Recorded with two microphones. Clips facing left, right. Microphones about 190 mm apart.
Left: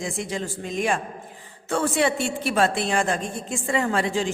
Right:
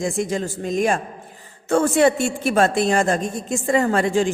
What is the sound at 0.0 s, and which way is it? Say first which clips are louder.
A man's voice: right 6 dB; 45° right (ahead or behind).